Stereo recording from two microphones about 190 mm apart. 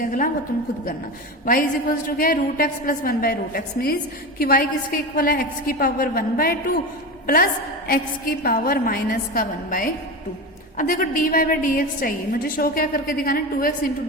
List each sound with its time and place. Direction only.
0.0 s a woman's voice: 45° left (ahead or behind)
1.5 s a woman's voice: 50° left (ahead or behind)
7.9 s a woman's voice: 50° left (ahead or behind)